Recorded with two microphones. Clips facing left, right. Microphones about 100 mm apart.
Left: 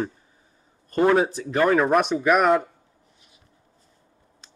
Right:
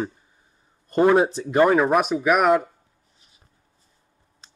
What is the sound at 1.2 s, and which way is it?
Speech, 25° right (ahead or behind).